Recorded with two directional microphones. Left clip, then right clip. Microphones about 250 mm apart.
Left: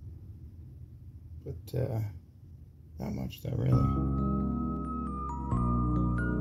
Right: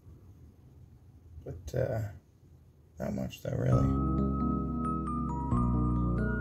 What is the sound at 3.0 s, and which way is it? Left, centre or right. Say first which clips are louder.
Speech: right 3 dB; left.